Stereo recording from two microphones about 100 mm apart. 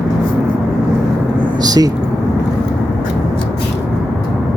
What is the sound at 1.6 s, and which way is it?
Speech, 40° right (ahead or behind).